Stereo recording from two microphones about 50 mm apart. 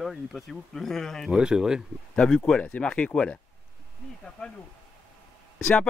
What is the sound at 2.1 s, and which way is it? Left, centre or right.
Speech, centre.